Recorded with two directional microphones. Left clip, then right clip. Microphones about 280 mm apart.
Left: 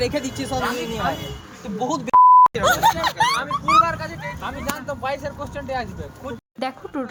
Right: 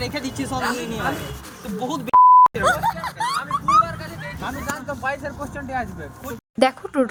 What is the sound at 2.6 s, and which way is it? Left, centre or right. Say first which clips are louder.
Snicker: left 3 dB; left.